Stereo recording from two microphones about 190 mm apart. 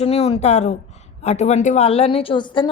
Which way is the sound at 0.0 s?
30° left (ahead or behind).